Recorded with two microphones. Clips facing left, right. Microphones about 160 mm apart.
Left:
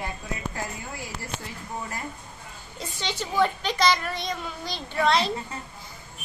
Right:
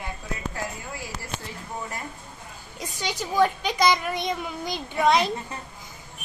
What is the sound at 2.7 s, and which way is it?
A child's voice, 10° right (ahead or behind).